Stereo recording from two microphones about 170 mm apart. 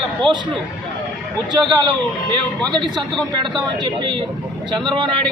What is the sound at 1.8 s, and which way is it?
Speech, 30° right (ahead or behind).